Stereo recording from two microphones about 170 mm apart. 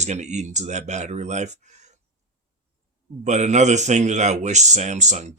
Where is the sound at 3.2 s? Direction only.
45° right (ahead or behind).